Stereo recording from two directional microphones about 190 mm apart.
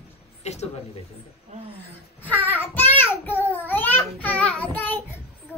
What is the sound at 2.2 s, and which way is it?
Child singing, 10° left (ahead or behind).